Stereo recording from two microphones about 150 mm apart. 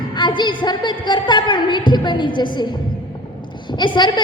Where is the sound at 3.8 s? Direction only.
30° left (ahead or behind).